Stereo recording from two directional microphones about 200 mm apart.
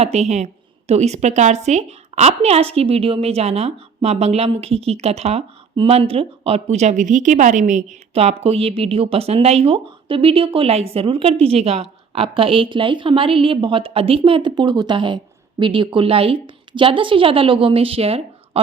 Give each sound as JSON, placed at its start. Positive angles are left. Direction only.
{"t": 0.0, "sound": "a woman's voice", "side_deg": -30}